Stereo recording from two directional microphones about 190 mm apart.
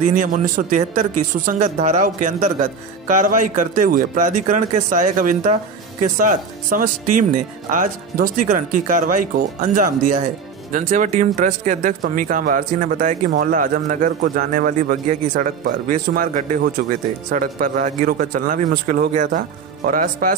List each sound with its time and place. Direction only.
0.0 s speech: 45° right (ahead or behind)
16.8 s speech: 60° right (ahead or behind)
17.3 s speech: 45° right (ahead or behind)